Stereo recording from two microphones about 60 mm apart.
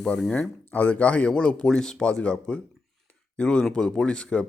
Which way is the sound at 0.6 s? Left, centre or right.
Left.